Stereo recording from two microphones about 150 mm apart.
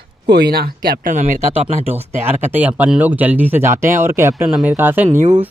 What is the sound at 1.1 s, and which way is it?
Speech, 50° right (ahead or behind).